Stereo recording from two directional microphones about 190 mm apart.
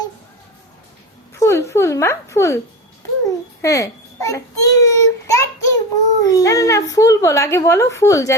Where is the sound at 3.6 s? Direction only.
15° left (ahead or behind).